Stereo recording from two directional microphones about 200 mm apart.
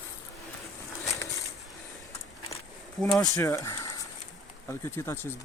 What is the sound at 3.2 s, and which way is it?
Speech, 15° left (ahead or behind).